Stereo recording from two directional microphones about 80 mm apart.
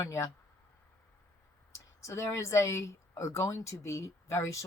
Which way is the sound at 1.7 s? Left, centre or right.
Left.